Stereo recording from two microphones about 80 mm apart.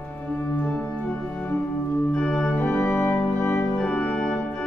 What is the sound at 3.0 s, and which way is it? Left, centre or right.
Music, centre.